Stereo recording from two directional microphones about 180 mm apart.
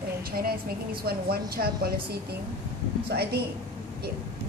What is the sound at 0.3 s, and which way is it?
A woman's voice, 55° right (ahead or behind).